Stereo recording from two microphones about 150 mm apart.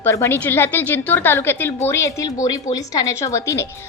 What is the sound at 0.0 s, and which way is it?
A woman's voice, 15° left (ahead or behind).